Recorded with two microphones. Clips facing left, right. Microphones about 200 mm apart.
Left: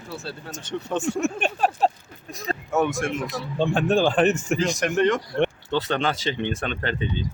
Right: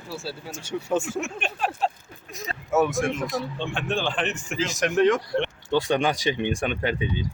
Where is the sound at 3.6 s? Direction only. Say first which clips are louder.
Left 7 dB; 40° left (ahead or behind).